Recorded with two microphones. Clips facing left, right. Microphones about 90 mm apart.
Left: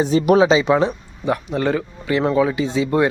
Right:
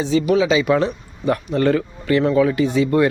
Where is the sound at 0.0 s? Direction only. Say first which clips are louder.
Left 3 dB; 50° left (ahead or behind).